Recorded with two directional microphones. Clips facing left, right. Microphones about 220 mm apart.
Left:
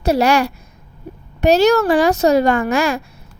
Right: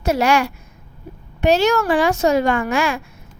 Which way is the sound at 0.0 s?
35° left (ahead or behind).